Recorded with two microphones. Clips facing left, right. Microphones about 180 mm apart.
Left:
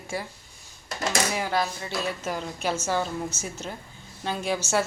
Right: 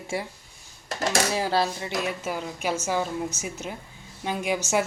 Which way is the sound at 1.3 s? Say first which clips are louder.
Right 2 dB; 30° right (ahead or behind).